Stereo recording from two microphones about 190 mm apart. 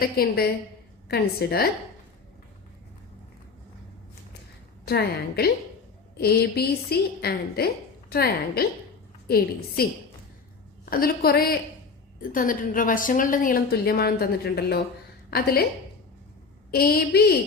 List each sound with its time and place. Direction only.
0.0 s a woman's voice: 50° left (ahead or behind)
4.9 s a woman's voice: 55° left (ahead or behind)
10.8 s a woman's voice: 50° left (ahead or behind)
16.7 s a woman's voice: 55° left (ahead or behind)